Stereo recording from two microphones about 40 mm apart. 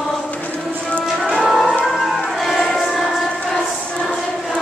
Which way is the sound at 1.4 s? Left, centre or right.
Centre.